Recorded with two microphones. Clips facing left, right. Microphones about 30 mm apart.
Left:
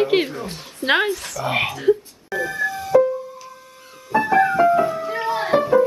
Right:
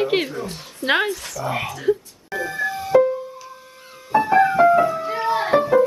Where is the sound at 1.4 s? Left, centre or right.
Left.